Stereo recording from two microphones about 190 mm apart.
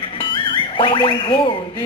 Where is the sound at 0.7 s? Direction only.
25° left (ahead or behind).